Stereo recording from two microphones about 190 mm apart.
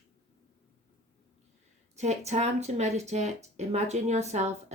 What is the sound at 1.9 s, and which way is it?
Speech, 35° right (ahead or behind).